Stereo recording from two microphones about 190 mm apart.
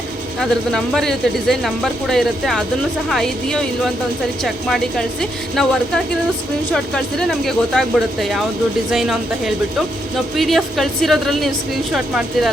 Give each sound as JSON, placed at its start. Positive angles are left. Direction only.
{"t": 0.3, "sound": "speech", "side_deg": 0}
{"t": 6.7, "sound": "speech", "side_deg": 0}
{"t": 10.3, "sound": "speech", "side_deg": 0}